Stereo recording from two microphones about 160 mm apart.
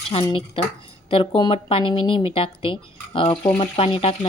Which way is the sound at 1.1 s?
30° left (ahead or behind).